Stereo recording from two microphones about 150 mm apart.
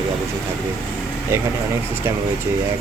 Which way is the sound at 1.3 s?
15° right (ahead or behind).